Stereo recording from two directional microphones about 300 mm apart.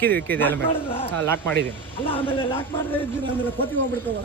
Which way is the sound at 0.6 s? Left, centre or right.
Centre.